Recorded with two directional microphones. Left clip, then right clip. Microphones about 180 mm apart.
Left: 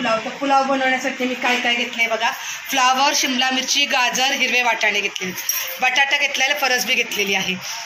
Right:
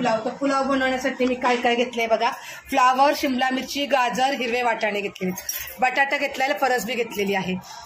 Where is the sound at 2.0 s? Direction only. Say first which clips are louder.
Left 2 dB; 70° right (ahead or behind).